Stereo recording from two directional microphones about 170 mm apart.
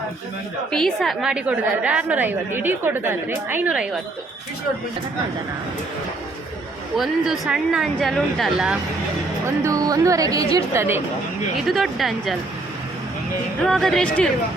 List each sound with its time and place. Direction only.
0.7 s a woman's voice: centre (ahead or behind)
6.9 s speech: centre (ahead or behind)
9.6 s a woman's voice: 20° right (ahead or behind)
11.5 s speech: centre (ahead or behind)
13.6 s speech: centre (ahead or behind)